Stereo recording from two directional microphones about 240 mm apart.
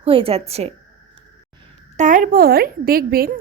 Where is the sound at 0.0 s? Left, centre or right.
Right.